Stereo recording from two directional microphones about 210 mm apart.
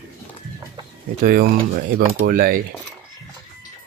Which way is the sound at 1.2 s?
45° right (ahead or behind).